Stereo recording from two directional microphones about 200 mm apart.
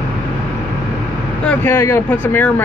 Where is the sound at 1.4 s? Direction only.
10° left (ahead or behind).